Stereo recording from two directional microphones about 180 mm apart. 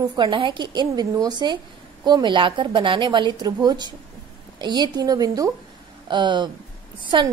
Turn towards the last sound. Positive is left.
turn(degrees=-25)  # may be behind; listen again after turning